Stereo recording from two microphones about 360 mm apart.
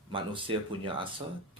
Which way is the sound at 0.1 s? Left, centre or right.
Centre.